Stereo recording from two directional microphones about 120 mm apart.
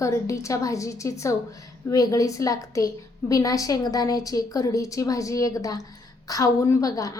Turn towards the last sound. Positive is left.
turn(degrees=30)  # may be behind; listen again after turning